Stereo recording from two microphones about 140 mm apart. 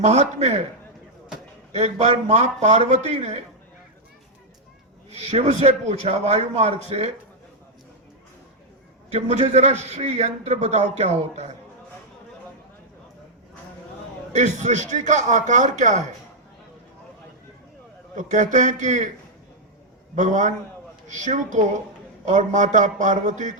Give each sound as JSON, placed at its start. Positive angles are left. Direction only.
{"t": 0.0, "sound": "a man's voice", "side_deg": -50}
{"t": 1.7, "sound": "a man's voice", "side_deg": -50}
{"t": 5.1, "sound": "a man's voice", "side_deg": -50}
{"t": 9.1, "sound": "a man's voice", "side_deg": -50}
{"t": 14.3, "sound": "a man's voice", "side_deg": -55}
{"t": 18.2, "sound": "a man's voice", "side_deg": -60}
{"t": 20.1, "sound": "a man's voice", "side_deg": -65}